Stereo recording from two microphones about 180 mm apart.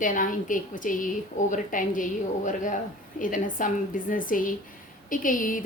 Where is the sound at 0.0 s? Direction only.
45° left (ahead or behind).